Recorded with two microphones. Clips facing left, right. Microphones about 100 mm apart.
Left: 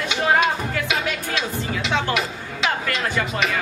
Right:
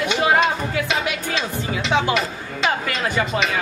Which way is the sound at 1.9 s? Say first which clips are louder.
Right 4 dB; 15° right (ahead or behind).